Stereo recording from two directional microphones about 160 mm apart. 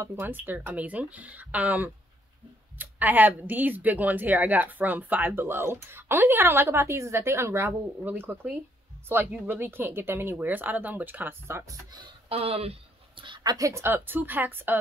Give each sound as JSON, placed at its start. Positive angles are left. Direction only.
{"t": 0.0, "sound": "speech", "side_deg": -10}
{"t": 11.9, "sound": "speech", "side_deg": -30}
{"t": 13.2, "sound": "speech", "side_deg": -25}